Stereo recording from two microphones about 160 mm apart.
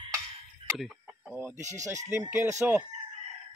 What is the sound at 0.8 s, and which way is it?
Speech, 10° right (ahead or behind).